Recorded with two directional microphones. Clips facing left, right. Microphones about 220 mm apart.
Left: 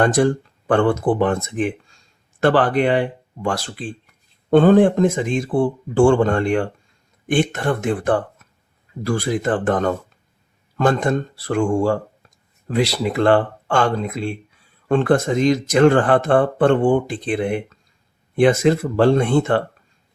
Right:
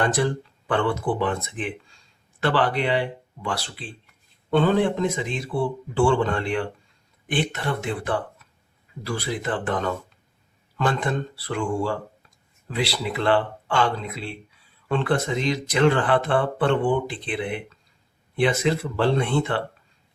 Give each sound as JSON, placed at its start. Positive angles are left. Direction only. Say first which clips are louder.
{"t": 0.0, "sound": "speech", "louder": "left 7 dB", "side_deg": 45}